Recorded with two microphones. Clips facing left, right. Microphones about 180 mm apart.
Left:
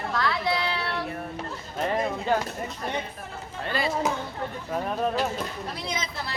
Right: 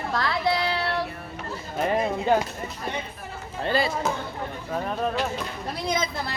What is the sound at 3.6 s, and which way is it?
Speech, 30° right (ahead or behind).